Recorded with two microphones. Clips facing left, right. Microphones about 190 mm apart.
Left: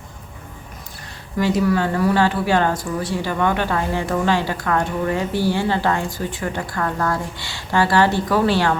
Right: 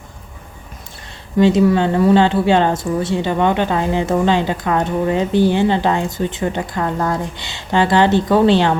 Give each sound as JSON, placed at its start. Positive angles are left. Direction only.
{"t": 1.4, "sound": "speech", "side_deg": -25}